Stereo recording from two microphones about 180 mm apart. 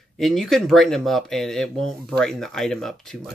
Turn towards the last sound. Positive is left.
turn(degrees=0)  # may be behind; listen again after turning